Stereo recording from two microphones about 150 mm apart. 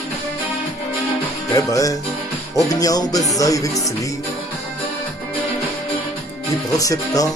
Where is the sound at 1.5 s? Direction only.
20° left (ahead or behind).